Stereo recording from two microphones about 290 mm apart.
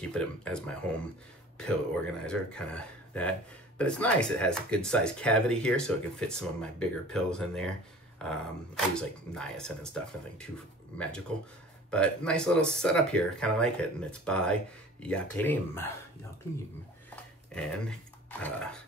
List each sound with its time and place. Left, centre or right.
0.0 s speech: centre
2.2 s speech: centre
17.1 s a sound: centre
18.4 s speech: centre